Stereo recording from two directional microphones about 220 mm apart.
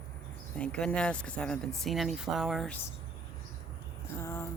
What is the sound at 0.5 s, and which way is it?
Speech, 5° left (ahead or behind).